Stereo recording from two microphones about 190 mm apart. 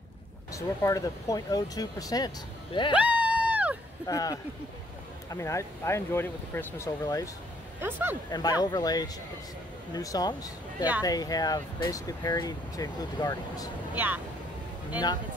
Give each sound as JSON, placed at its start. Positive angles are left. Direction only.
{"t": 0.5, "sound": "speech", "side_deg": 15}
{"t": 3.0, "sound": "a sound", "side_deg": -5}
{"t": 4.1, "sound": "speech", "side_deg": 20}
{"t": 7.8, "sound": "speech", "side_deg": -10}
{"t": 8.3, "sound": "speech", "side_deg": 20}
{"t": 13.9, "sound": "speech", "side_deg": -10}